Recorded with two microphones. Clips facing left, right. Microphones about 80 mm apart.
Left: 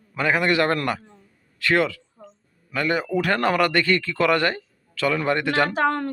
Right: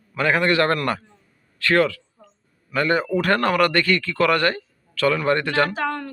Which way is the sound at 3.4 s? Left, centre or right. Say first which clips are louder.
Right 1 dB; centre.